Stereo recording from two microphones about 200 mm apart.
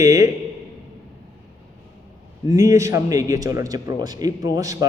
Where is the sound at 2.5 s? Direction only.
15° right (ahead or behind).